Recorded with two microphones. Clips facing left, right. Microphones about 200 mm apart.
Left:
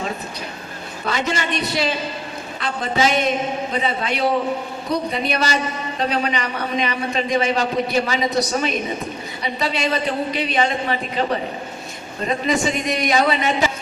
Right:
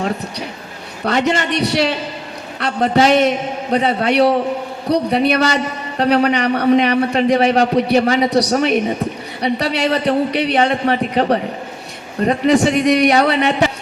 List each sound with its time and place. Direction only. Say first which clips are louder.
1.0 s a man's voice: right 6 dB; 65° right (ahead or behind)